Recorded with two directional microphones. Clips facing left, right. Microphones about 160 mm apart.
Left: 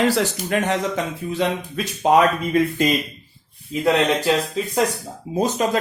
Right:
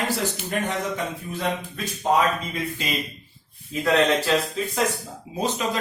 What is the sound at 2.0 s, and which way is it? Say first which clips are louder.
Speech: left 5 dB; 70° left (ahead or behind).